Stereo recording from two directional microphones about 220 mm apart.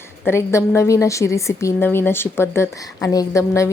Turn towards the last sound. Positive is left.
turn(degrees=15)  # may be behind; listen again after turning